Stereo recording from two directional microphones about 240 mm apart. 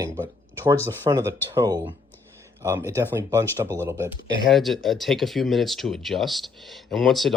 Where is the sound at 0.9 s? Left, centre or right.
Centre.